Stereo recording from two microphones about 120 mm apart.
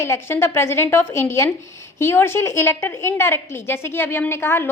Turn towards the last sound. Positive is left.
turn(degrees=20)  # may be behind; listen again after turning